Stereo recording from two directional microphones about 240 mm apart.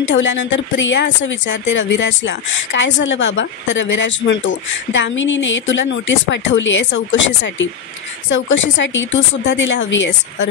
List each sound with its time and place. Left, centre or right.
0.1 s speech: left